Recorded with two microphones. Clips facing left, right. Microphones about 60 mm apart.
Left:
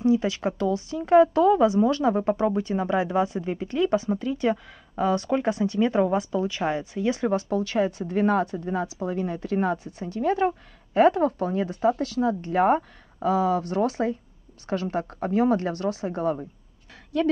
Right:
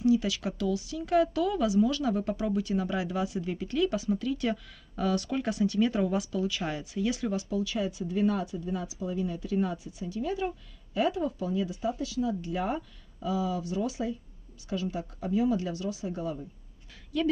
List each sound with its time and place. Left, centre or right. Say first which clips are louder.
0.0 s speech: left 4 dB; left
7.4 s speech: left 6 dB; left